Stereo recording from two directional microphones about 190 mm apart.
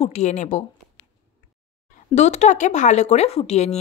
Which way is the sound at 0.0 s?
35° left (ahead or behind).